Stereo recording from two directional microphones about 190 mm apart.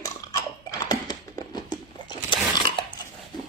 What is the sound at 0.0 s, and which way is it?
Burping, 20° left (ahead or behind).